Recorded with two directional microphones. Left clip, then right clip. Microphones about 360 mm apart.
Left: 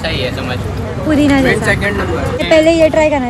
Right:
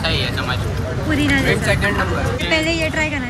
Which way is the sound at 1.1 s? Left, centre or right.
Centre.